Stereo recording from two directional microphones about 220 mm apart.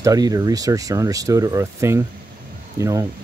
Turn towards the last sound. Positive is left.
turn(degrees=-15)  # may be behind; listen again after turning